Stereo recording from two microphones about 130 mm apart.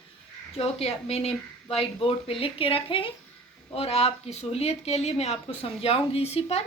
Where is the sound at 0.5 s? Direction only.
50° left (ahead or behind).